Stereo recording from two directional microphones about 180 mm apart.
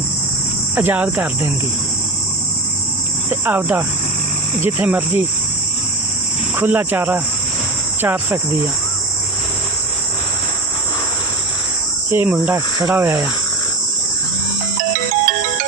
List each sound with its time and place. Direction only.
0.8 s cricket: 10° right (ahead or behind)
3.2 s cricket: 10° right (ahead or behind)
6.6 s cricket: 10° right (ahead or behind)
12.1 s cricket: 10° right (ahead or behind)
14.9 s ringtone: 45° right (ahead or behind)